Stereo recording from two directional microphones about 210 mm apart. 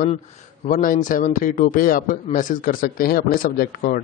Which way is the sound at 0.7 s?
40° left (ahead or behind).